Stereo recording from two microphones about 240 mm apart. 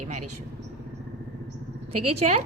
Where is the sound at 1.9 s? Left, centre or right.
Right.